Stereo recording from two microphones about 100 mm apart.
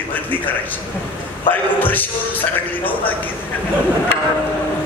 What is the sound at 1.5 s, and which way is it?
Speech, 20° left (ahead or behind).